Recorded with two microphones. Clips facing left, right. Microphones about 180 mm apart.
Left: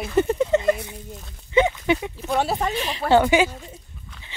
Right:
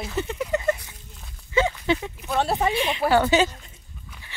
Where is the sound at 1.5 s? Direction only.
20° left (ahead or behind).